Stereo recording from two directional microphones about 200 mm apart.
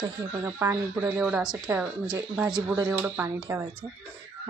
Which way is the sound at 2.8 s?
10° right (ahead or behind).